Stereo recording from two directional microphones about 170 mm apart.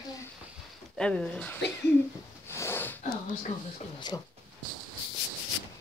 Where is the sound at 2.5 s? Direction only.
15° left (ahead or behind).